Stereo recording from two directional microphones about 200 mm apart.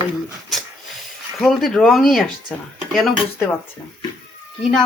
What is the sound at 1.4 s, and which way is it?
Speech, centre (ahead or behind).